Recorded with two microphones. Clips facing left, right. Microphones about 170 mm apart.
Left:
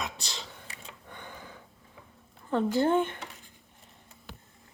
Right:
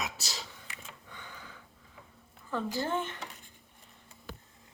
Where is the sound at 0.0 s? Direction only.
5° right (ahead or behind).